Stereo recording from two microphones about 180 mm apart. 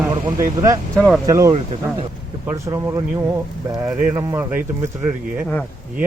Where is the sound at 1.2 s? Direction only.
20° right (ahead or behind).